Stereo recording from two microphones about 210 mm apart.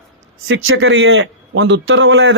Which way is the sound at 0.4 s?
70° right (ahead or behind).